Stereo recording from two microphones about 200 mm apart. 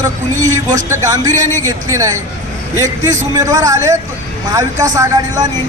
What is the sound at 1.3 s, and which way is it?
Speech, 40° right (ahead or behind).